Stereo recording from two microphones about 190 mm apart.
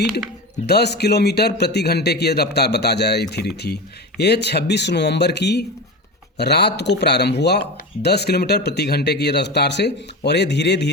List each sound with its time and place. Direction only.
0.7 s speech: 60° left (ahead or behind)